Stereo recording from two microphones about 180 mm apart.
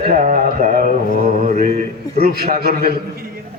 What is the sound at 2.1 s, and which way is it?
Speech, 60° right (ahead or behind).